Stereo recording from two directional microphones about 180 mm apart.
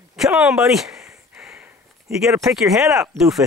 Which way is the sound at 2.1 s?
5° right (ahead or behind).